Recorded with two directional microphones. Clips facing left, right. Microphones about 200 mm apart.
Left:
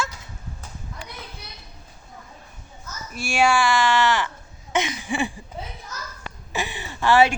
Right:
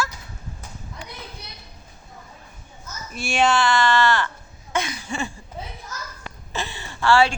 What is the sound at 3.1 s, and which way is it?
Speech, 10° left (ahead or behind).